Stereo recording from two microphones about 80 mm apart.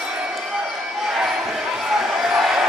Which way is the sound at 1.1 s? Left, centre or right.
Centre.